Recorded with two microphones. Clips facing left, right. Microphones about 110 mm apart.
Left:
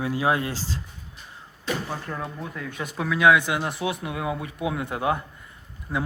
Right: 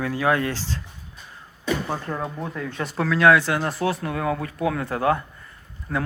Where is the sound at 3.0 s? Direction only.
10° left (ahead or behind).